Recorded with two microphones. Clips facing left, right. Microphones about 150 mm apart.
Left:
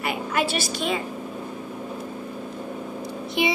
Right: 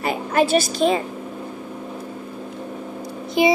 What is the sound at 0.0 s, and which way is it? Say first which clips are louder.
A woman's voice: right 5 dB; 40° right (ahead or behind).